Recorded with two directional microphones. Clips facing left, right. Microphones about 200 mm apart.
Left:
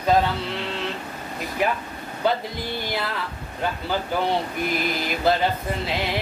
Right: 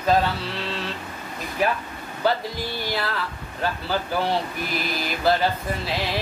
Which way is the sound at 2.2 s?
20° left (ahead or behind).